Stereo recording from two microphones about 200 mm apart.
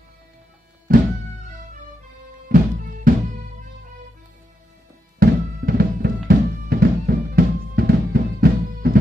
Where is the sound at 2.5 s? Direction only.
45° right (ahead or behind).